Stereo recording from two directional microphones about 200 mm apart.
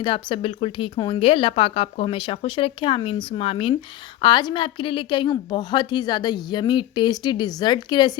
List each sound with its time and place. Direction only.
0.0 s a woman's voice: 25° left (ahead or behind)